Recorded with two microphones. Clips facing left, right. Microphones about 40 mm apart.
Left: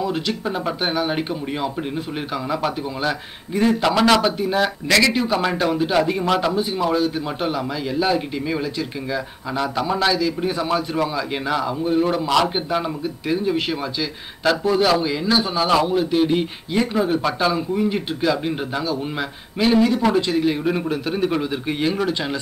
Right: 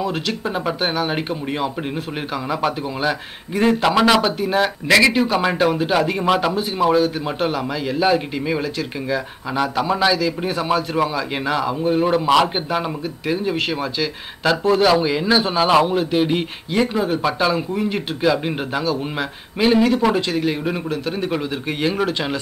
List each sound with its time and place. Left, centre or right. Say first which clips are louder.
0.1 s a man's voice: even; centre
9.6 s a man's voice: right 2 dB; centre
16.9 s a man's voice: even; centre